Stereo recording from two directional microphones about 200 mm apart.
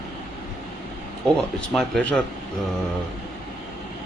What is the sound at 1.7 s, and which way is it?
Speech, centre (ahead or behind).